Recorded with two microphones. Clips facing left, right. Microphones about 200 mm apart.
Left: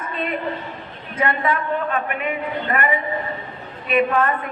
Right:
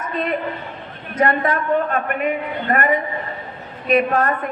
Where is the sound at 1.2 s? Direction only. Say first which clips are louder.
Right 3 dB; 45° right (ahead or behind).